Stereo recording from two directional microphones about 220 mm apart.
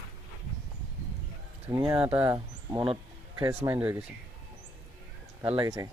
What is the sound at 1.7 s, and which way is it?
Speech, 20° right (ahead or behind).